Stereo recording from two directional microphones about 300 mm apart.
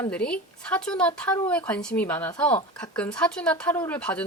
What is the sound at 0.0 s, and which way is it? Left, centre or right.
Speech, centre.